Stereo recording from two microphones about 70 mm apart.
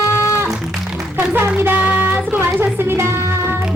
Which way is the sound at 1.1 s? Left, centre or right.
Right.